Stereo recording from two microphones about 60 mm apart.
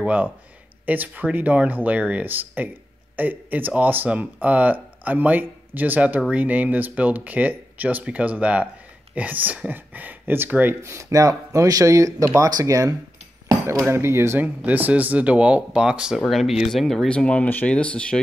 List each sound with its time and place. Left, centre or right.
0.0 s speech: right
10.8 s speech: right
11.1 s speech: right
12.4 s speech: right
13.7 s speech: right
14.4 s speech: right; by 16.2 s centre
16.3 s speech: centre
17.1 s speech: centre